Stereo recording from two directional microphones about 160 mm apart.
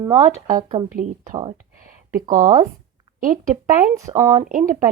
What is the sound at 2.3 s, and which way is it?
Speech, 50° right (ahead or behind).